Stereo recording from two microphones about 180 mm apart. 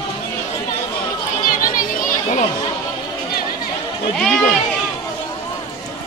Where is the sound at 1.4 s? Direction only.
50° left (ahead or behind).